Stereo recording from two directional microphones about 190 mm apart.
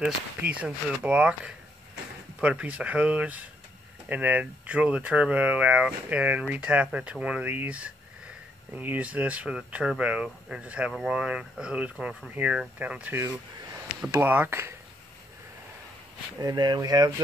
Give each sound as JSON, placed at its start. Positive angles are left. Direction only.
{"t": 0.0, "sound": "speech", "side_deg": -5}
{"t": 16.3, "sound": "speech", "side_deg": -20}